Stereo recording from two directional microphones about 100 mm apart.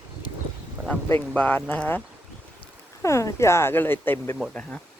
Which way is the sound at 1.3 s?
15° left (ahead or behind).